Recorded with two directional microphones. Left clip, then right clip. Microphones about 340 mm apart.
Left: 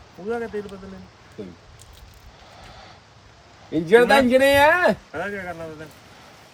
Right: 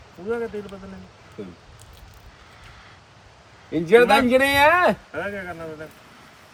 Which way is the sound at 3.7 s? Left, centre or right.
Centre.